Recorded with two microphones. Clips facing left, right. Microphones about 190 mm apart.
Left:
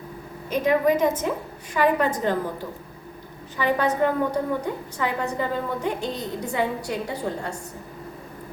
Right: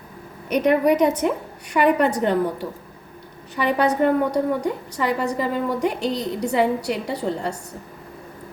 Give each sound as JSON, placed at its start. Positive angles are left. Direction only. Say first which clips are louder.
{"t": 0.5, "sound": "a woman's voice", "louder": "right 3 dB", "side_deg": -70}